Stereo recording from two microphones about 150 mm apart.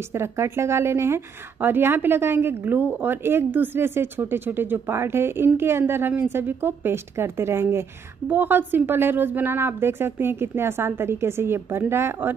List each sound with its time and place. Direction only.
0.1 s a woman's voice: 15° right (ahead or behind)